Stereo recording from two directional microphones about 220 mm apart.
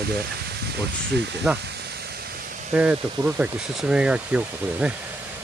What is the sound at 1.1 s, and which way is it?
Speech, 50° right (ahead or behind).